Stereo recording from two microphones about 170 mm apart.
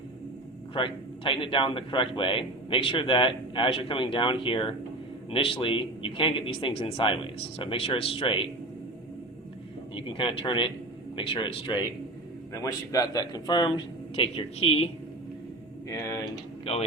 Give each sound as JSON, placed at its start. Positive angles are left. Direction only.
{"t": 0.7, "sound": "a man's voice", "side_deg": 30}
{"t": 9.9, "sound": "a man's voice", "side_deg": 30}
{"t": 15.9, "sound": "speech", "side_deg": 20}
{"t": 16.7, "sound": "a man's voice", "side_deg": 35}